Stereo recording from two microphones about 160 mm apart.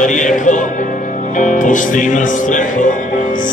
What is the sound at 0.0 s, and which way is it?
Music, 50° left (ahead or behind).